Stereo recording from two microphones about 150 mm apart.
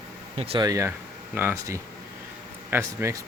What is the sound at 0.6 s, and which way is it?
Speech, 20° right (ahead or behind).